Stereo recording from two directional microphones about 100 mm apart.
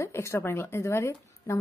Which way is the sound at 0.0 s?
30° left (ahead or behind).